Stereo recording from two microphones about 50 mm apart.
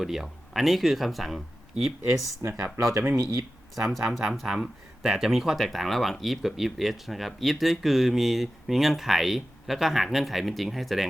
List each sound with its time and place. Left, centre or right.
0.0 s speech: centre
2.4 s speech: right
3.8 s speech: centre